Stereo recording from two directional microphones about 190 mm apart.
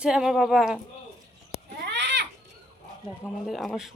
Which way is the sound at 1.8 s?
60° right (ahead or behind).